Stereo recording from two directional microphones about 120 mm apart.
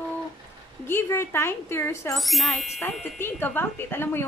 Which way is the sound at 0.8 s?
20° left (ahead or behind).